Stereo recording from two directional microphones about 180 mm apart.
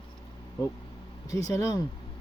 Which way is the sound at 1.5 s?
20° left (ahead or behind).